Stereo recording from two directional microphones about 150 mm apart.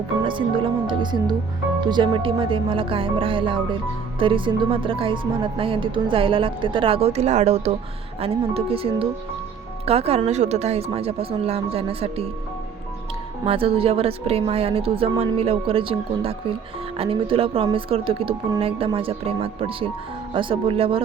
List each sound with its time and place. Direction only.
0.3 s a woman's voice: 35° right (ahead or behind)
13.4 s a woman's voice: 40° right (ahead or behind)